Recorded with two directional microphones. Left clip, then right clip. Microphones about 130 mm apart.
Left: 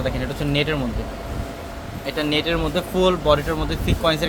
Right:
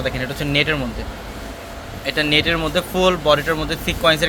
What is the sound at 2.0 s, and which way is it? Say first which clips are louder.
Speech: right 5 dB; 15° right (ahead or behind).